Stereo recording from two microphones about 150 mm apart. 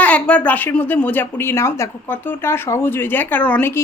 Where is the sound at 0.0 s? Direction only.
10° left (ahead or behind).